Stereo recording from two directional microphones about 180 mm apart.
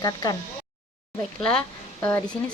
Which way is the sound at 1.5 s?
5° left (ahead or behind).